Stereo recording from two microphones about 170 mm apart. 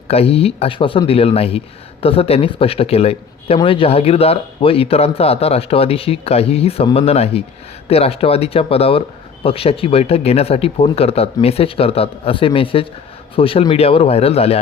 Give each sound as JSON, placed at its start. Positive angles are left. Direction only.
{"t": 0.1, "sound": "speech", "side_deg": 35}